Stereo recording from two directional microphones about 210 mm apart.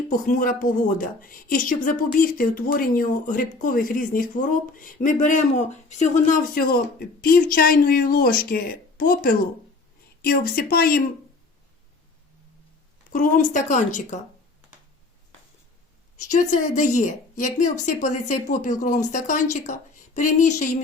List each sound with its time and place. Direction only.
0.3 s a woman's voice: 40° left (ahead or behind)
13.1 s speech: 40° left (ahead or behind)
16.5 s speech: 35° left (ahead or behind)